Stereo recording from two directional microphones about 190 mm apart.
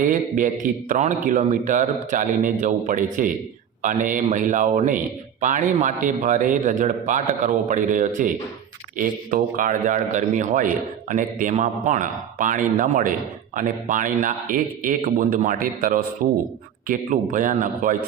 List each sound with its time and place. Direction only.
0.0 s a man's voice: 45° right (ahead or behind)